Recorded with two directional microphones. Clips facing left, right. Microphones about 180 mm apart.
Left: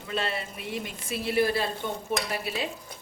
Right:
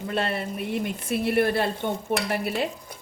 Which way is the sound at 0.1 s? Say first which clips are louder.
Right 3 dB; 50° right (ahead or behind).